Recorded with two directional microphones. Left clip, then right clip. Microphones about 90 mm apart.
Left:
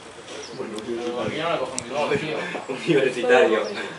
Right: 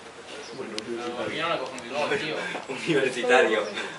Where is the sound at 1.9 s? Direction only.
25° right (ahead or behind).